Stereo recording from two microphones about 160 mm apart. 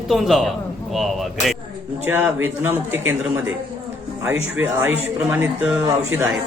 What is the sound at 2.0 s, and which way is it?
A man's voice, 15° right (ahead or behind).